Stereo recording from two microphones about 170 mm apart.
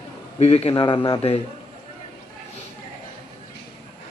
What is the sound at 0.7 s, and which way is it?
Speech, 25° left (ahead or behind).